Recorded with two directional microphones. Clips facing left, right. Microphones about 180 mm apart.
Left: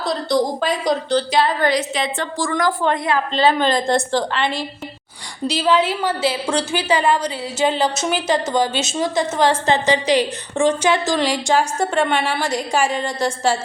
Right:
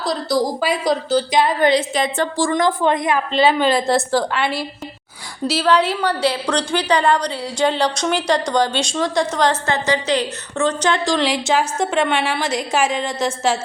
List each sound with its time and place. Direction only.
0.0 s a woman's voice: 5° right (ahead or behind)
1.9 s a woman's voice: 40° right (ahead or behind)
2.4 s a woman's voice: 25° right (ahead or behind); by 9.6 s 5° left (ahead or behind)
9.6 s a woman's voice: 15° left (ahead or behind); by 13.5 s 5° right (ahead or behind)